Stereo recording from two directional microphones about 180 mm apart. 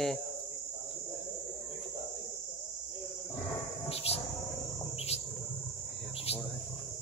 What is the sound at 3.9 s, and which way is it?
Cricket, 35° left (ahead or behind).